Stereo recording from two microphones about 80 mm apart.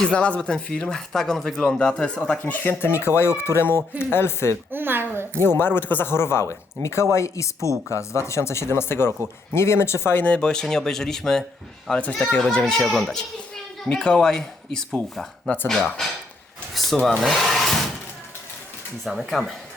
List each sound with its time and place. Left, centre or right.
0.1 s speech: centre; by 4.5 s left
4.7 s a woman's voice: right
5.4 s speech: left
10.2 s speech: centre
17.0 s speech: centre
19.0 s speech: centre